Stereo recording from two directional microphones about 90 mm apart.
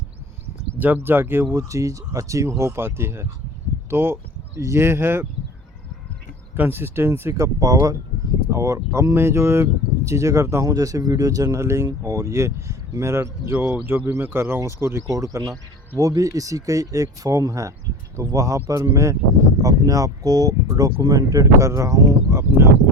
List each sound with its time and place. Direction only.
0.8 s speech: 20° right (ahead or behind)
1.5 s speech: 35° right (ahead or behind)
6.6 s speech: 25° right (ahead or behind)